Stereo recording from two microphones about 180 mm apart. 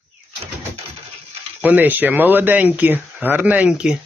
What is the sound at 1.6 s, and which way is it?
Speech, 10° right (ahead or behind).